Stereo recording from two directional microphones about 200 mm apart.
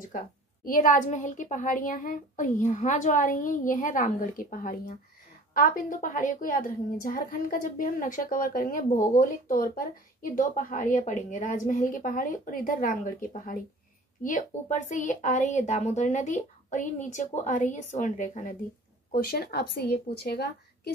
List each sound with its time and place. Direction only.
0.7 s a woman's voice: 40° left (ahead or behind)
19.1 s a woman's voice: 50° left (ahead or behind)